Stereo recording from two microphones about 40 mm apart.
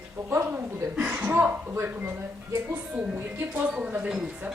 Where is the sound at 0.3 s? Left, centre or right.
Right.